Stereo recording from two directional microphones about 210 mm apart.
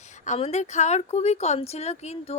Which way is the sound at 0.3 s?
30° left (ahead or behind).